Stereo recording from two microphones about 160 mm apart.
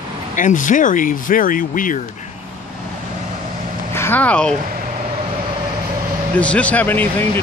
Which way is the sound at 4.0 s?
10° left (ahead or behind).